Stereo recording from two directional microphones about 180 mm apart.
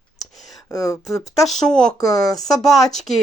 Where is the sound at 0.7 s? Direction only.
15° left (ahead or behind).